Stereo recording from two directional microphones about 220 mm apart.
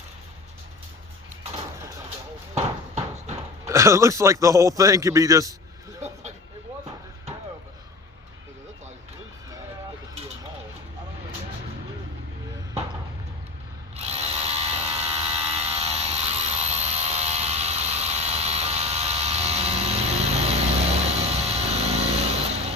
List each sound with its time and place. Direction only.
2.6 s horse: 30° right (ahead or behind)
3.7 s a man's voice: 15° right (ahead or behind)
13.9 s a sound: 30° right (ahead or behind)